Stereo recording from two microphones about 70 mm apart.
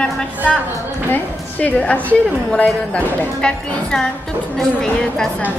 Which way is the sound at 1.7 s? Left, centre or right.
Left.